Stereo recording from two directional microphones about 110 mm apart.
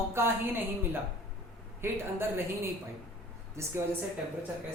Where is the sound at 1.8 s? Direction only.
20° right (ahead or behind).